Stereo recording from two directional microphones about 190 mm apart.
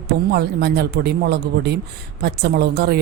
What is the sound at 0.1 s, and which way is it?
A woman's voice, 60° right (ahead or behind).